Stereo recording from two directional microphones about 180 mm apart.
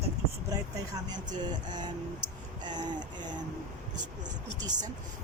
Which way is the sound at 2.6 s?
25° right (ahead or behind).